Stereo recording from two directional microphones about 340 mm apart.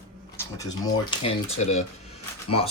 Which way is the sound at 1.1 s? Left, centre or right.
Centre.